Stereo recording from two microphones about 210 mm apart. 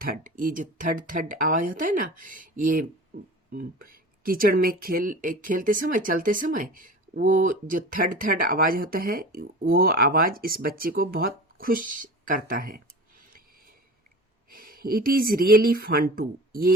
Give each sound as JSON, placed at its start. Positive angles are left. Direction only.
{"t": 0.0, "sound": "speech", "side_deg": -40}
{"t": 14.5, "sound": "speech", "side_deg": -45}